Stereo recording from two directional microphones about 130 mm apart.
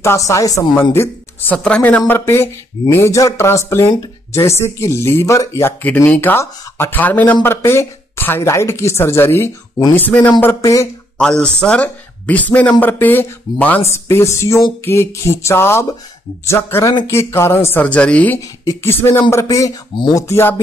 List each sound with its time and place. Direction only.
0.0 s a man's voice: 20° left (ahead or behind)
11.1 s a man's voice: 5° left (ahead or behind)